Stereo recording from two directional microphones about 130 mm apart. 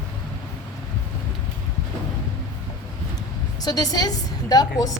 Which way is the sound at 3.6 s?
30° left (ahead or behind).